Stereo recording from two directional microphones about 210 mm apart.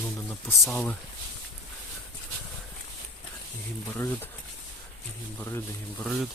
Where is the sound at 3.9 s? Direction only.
10° left (ahead or behind).